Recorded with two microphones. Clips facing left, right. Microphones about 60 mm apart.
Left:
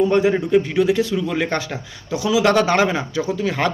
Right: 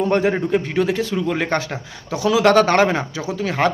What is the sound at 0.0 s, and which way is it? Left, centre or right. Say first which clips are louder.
A man's voice: left 1 dB; right.